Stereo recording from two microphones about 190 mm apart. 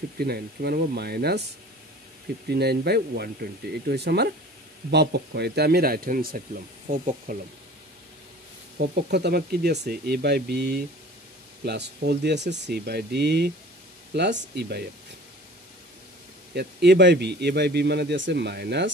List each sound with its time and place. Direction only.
0.2 s speech: 55° right (ahead or behind)
2.4 s speech: 55° right (ahead or behind)
8.7 s speech: 60° right (ahead or behind)
14.5 s speech: 60° right (ahead or behind)
16.5 s speech: 65° right (ahead or behind)